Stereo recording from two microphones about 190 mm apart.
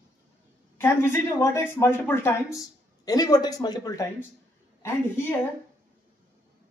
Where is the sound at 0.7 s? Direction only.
10° left (ahead or behind).